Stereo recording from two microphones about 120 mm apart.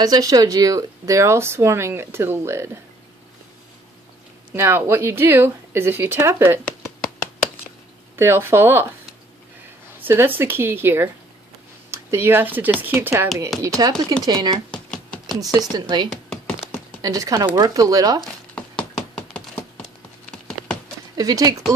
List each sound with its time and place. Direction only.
0.0 s speech: 30° right (ahead or behind)
4.5 s speech: 20° right (ahead or behind)
8.2 s speech: 20° right (ahead or behind)
9.9 s speech: 15° right (ahead or behind)
13.6 s speech: 30° right (ahead or behind)
14.7 s a sound: 5° left (ahead or behind)
15.7 s speech: 40° right (ahead or behind)
18.5 s a sound: 10° left (ahead or behind)
21.2 s speech: 30° right (ahead or behind)